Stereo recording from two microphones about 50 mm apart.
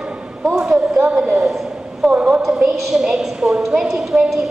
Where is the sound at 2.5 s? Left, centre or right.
Centre.